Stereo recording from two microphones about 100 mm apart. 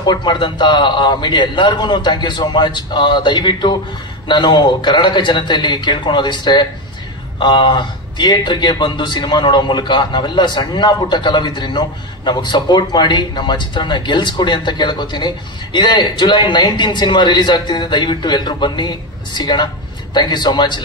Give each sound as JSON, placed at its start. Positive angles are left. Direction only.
{"t": 0.0, "sound": "speech", "side_deg": 50}